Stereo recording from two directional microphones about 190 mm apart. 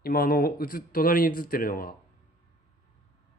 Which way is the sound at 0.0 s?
50° left (ahead or behind).